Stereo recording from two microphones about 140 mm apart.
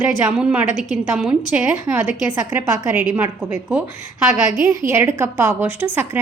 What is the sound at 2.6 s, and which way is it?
Speech, 20° right (ahead or behind).